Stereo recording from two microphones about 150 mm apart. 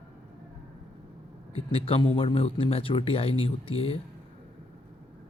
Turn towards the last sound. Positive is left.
turn(degrees=40)  # may be behind; listen again after turning